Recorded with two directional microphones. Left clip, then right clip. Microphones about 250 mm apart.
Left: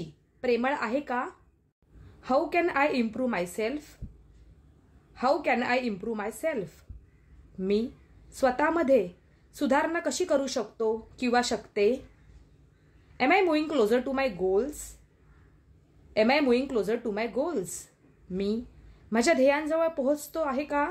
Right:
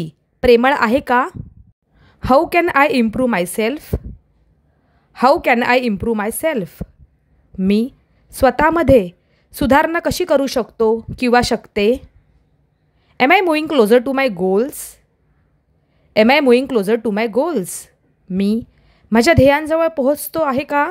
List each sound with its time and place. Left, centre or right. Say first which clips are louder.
0.4 s a woman's voice: right 15 dB; right
5.1 s a woman's voice: right 13 dB; right
13.2 s a woman's voice: right 11 dB; right
16.1 s a woman's voice: right 12 dB; right